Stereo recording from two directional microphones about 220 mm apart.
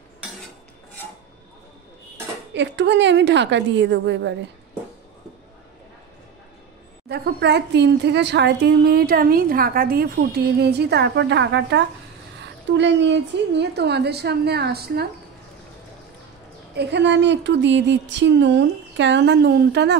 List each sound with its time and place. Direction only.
2.5 s speech: 55° right (ahead or behind)
7.1 s speech: 50° right (ahead or behind)
16.7 s speech: 50° right (ahead or behind)